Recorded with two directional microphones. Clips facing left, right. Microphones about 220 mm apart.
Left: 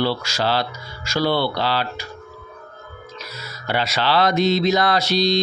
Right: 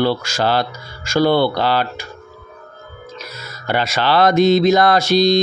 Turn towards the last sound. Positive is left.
turn(degrees=-50)  # may be behind; listen again after turning